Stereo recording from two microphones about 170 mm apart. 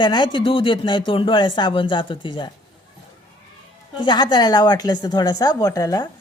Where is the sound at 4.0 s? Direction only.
25° left (ahead or behind).